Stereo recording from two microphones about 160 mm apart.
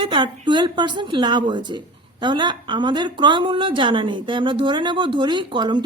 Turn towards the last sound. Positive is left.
turn(degrees=-30)  # may be behind; listen again after turning